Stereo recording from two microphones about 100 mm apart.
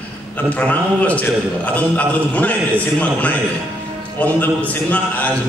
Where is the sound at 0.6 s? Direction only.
15° left (ahead or behind).